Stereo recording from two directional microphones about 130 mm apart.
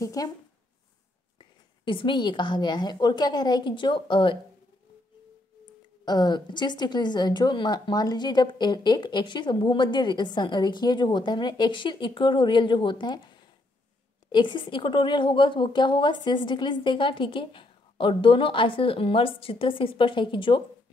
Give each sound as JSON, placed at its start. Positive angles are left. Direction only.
{"t": 0.0, "sound": "speech", "side_deg": 25}
{"t": 1.9, "sound": "a woman's voice", "side_deg": 40}
{"t": 6.0, "sound": "a woman's voice", "side_deg": 35}